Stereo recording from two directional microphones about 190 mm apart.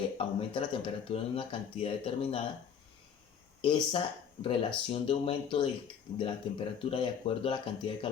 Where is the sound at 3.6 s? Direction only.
25° left (ahead or behind).